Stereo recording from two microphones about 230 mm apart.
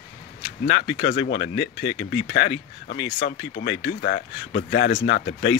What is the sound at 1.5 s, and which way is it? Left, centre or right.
Speech, left.